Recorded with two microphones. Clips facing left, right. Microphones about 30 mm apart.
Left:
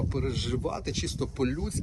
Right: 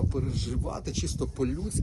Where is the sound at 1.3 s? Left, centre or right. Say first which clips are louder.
Left 1 dB; left.